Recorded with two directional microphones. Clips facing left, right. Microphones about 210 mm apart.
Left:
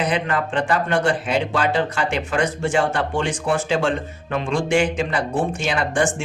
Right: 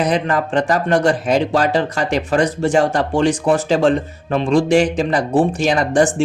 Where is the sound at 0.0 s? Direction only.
40° right (ahead or behind).